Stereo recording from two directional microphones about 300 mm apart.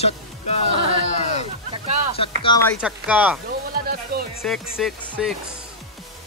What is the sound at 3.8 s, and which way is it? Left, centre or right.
Music, right.